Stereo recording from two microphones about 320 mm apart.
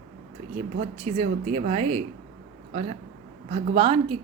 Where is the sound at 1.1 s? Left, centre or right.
Centre.